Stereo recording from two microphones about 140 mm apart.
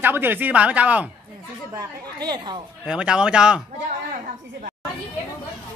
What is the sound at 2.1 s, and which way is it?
Speech, 30° right (ahead or behind).